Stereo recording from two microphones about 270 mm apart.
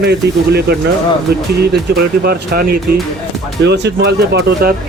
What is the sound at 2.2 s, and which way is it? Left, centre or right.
Speech, right.